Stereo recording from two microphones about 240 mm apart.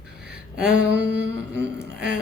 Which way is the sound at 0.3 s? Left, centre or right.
Centre.